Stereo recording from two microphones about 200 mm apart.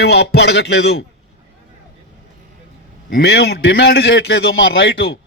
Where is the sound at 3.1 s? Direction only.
55° left (ahead or behind).